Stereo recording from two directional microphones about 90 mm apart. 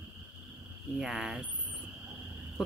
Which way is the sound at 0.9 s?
5° right (ahead or behind).